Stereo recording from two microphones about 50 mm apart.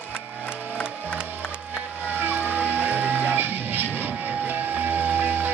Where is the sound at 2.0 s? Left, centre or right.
Right.